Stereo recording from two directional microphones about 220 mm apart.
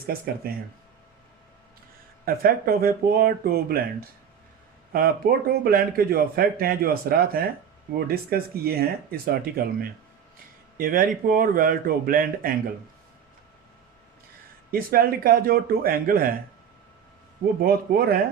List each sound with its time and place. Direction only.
0.4 s speech: 45° right (ahead or behind)
2.2 s speech: 40° right (ahead or behind)
4.9 s speech: 45° right (ahead or behind)
14.7 s speech: 40° right (ahead or behind)
17.4 s speech: 45° right (ahead or behind)